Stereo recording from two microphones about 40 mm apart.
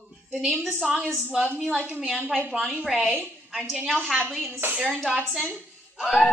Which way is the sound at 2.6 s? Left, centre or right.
Centre.